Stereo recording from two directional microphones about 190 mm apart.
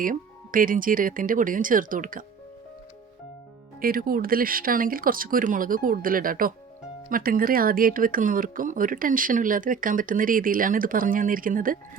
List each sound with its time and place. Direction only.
0.0 s speech: 45° right (ahead or behind)
3.8 s speech: 50° right (ahead or behind)